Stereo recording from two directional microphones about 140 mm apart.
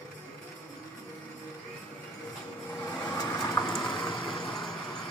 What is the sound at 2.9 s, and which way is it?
Vehicle, 25° left (ahead or behind).